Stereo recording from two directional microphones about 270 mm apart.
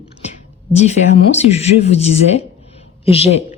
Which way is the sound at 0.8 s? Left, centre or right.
Left.